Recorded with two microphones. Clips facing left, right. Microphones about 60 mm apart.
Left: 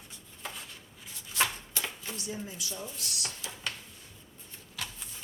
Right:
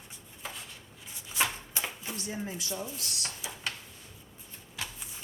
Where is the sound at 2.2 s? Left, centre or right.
Right.